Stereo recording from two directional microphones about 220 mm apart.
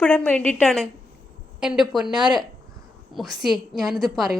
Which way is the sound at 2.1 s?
20° right (ahead or behind).